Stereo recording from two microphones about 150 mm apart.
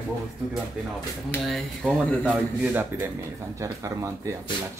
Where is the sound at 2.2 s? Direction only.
10° right (ahead or behind).